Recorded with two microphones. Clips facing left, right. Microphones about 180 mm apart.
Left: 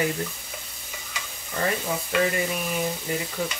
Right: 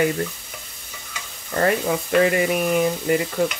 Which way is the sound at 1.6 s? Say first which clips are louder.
Right 7 dB; 70° right (ahead or behind).